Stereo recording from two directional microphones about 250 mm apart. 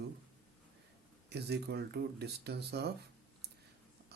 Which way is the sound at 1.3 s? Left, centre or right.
Right.